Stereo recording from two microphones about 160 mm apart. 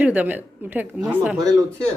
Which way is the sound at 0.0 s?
10° right (ahead or behind).